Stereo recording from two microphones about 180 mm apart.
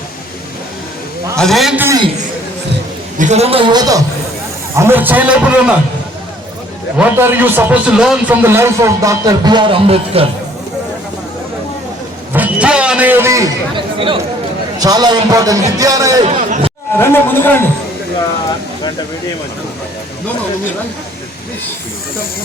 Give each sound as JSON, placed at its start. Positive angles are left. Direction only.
{"t": 1.4, "sound": "a man's voice", "side_deg": 0}
{"t": 3.2, "sound": "a man's voice", "side_deg": -40}
{"t": 7.0, "sound": "a man's voice", "side_deg": -10}
{"t": 12.3, "sound": "a man's voice", "side_deg": -10}
{"t": 16.2, "sound": "a sound", "side_deg": -35}
{"t": 17.0, "sound": "speech", "side_deg": 10}